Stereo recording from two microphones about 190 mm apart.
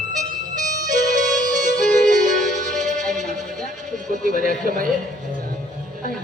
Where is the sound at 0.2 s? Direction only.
40° right (ahead or behind).